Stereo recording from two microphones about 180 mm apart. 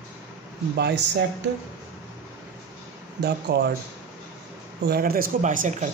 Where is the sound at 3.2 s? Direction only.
65° right (ahead or behind).